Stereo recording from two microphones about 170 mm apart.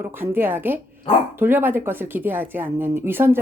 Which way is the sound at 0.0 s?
10° right (ahead or behind).